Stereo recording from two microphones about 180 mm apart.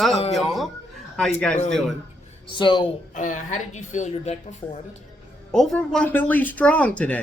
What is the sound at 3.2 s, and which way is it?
Speech, 45° left (ahead or behind).